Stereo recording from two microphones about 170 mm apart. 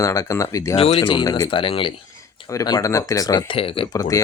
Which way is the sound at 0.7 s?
35° left (ahead or behind).